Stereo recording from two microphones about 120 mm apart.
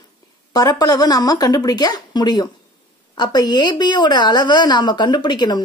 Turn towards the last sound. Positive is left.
turn(degrees=35)  # may be behind; listen again after turning